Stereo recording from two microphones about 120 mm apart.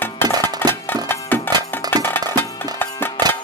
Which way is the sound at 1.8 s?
35° right (ahead or behind).